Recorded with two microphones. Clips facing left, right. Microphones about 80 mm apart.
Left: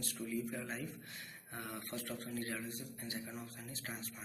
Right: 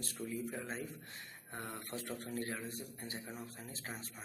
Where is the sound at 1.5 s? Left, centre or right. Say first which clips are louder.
Even; right.